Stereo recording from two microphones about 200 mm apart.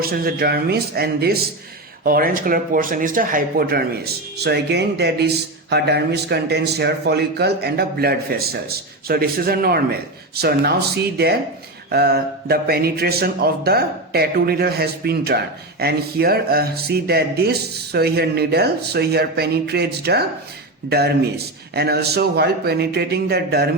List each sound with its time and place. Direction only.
0.0 s a man's voice: 50° right (ahead or behind)